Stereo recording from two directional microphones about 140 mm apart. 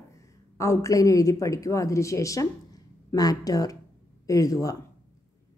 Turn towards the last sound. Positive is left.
turn(degrees=25)  # may be behind; listen again after turning